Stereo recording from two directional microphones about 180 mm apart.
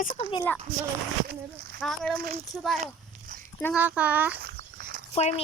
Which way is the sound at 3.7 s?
10° right (ahead or behind).